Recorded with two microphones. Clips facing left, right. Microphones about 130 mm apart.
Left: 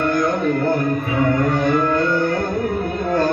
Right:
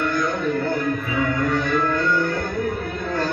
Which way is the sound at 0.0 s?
50° left (ahead or behind).